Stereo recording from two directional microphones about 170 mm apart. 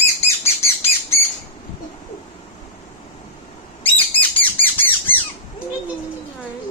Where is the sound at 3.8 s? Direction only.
10° left (ahead or behind).